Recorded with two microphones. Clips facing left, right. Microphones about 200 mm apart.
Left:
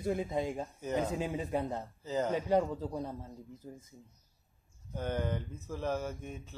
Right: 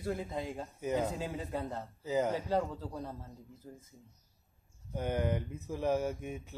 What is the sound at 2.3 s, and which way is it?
A man's voice, 20° left (ahead or behind).